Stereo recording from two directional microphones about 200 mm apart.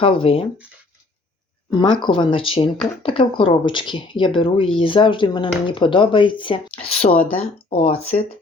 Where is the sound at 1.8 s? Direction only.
25° left (ahead or behind).